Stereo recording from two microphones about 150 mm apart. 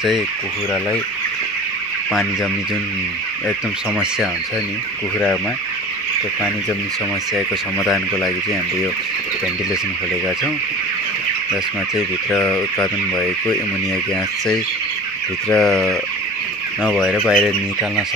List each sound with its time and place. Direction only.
7.8 s speech: 20° left (ahead or behind)
12.3 s speech: 10° left (ahead or behind)
15.5 s fowl: centre (ahead or behind)